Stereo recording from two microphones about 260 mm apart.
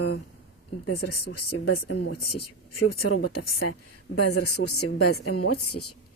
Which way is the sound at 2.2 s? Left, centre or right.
Left.